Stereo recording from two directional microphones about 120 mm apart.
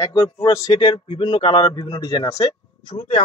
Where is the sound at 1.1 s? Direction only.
40° left (ahead or behind).